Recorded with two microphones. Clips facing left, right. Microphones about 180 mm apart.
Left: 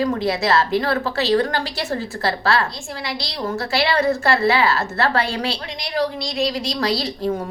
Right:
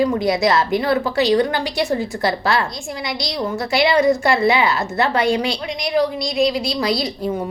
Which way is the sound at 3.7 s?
15° right (ahead or behind).